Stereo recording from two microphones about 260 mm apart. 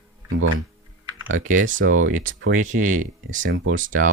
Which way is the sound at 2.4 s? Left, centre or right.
Right.